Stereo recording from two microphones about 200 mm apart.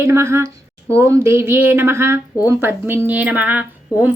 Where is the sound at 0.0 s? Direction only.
15° right (ahead or behind).